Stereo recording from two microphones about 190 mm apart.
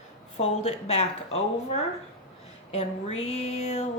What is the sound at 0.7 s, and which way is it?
Speech, 35° left (ahead or behind).